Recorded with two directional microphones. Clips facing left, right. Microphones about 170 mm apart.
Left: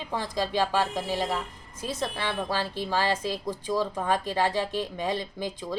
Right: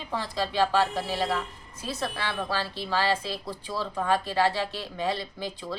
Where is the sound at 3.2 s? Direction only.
45° left (ahead or behind).